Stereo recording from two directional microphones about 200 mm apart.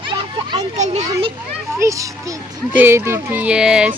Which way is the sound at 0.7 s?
35° right (ahead or behind).